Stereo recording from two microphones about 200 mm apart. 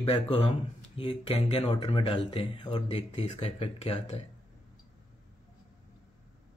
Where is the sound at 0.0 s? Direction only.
30° left (ahead or behind).